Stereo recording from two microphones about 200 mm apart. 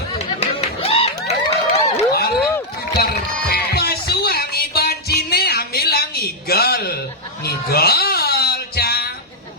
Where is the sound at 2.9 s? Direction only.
50° left (ahead or behind).